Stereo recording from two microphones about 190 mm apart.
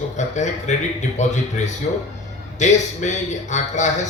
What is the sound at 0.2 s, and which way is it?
Speech, 40° left (ahead or behind).